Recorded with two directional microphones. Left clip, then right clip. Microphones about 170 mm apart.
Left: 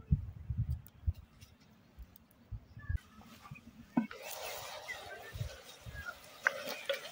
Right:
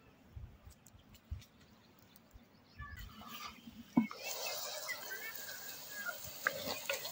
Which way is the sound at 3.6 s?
20° left (ahead or behind).